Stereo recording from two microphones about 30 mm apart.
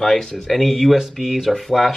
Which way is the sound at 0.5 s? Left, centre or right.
Centre.